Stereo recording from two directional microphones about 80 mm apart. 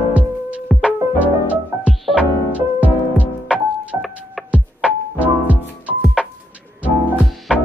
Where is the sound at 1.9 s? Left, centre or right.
Centre.